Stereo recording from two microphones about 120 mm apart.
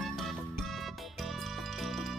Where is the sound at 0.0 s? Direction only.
Centre (ahead or behind).